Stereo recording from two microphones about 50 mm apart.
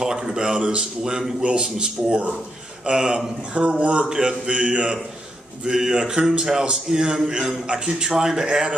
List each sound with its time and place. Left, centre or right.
0.0 s a man's voice: centre
8.1 s a man's voice: centre
8.5 s speech: centre